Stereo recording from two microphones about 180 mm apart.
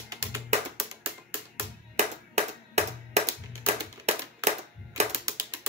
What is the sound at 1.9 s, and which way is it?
Music, 40° right (ahead or behind).